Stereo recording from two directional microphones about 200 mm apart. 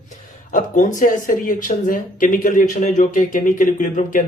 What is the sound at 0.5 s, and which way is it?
Speech, 40° left (ahead or behind).